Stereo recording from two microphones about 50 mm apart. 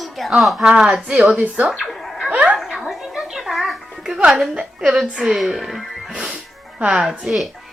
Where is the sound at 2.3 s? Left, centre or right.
Right.